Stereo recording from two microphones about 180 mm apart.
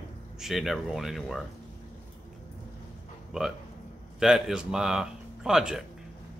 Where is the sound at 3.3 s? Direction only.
5° right (ahead or behind).